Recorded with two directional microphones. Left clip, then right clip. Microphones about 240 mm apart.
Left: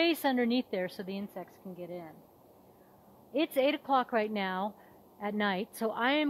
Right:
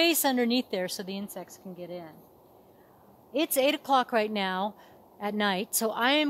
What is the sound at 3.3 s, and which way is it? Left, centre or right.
Speech, centre.